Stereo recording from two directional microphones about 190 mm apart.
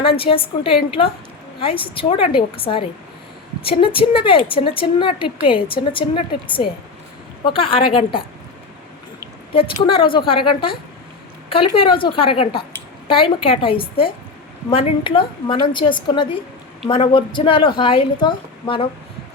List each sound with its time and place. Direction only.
0.2 s a woman's voice: 30° left (ahead or behind)
9.6 s a woman's voice: 25° left (ahead or behind)